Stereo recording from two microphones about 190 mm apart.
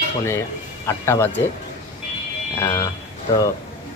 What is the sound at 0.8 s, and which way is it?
Speech, 15° left (ahead or behind).